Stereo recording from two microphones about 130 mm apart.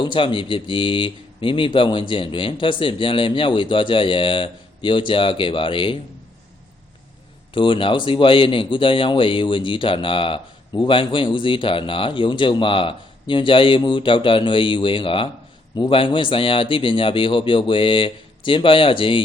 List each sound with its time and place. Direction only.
0.0 s speech: 40° left (ahead or behind)
7.5 s speech: 40° left (ahead or behind)